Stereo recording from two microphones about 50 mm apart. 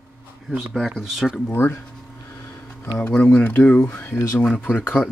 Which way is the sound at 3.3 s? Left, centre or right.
Left.